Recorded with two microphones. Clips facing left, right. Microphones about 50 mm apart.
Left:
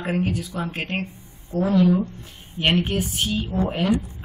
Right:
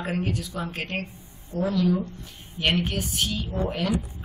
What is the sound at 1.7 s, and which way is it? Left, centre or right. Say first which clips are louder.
A woman's voice: left 6 dB; left.